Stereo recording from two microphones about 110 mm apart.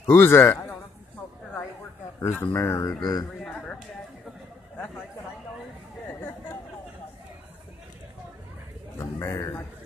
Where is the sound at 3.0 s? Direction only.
35° left (ahead or behind).